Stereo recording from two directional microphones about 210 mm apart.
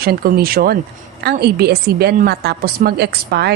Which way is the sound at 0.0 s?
45° right (ahead or behind).